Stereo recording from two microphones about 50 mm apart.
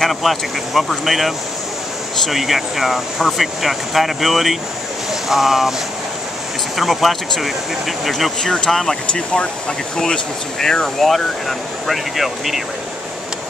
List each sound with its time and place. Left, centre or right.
0.0 s speech: centre
6.8 s speech: centre
8.4 s speech: centre
9.1 s speech: left
11.0 s speech: centre